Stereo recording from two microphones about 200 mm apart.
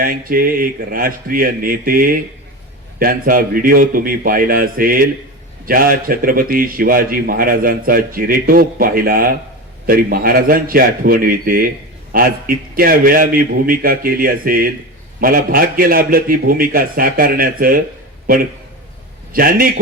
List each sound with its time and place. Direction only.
0.0 s a man's voice: 45° right (ahead or behind)
19.3 s a man's voice: 45° right (ahead or behind)